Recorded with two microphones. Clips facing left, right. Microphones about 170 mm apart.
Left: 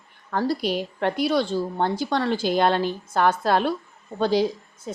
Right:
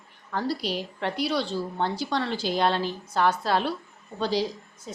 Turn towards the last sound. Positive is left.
turn(degrees=50)  # may be behind; listen again after turning